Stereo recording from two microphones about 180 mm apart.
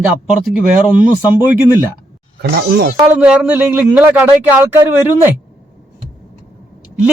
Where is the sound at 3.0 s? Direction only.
5° right (ahead or behind).